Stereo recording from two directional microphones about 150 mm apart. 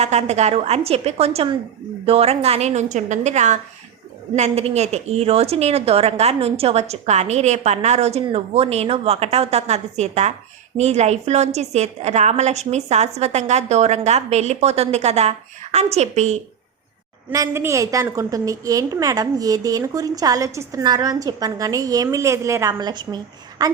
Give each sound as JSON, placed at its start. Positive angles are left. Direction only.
{"t": 0.0, "sound": "a woman's voice", "side_deg": -45}
{"t": 17.3, "sound": "a woman's voice", "side_deg": -20}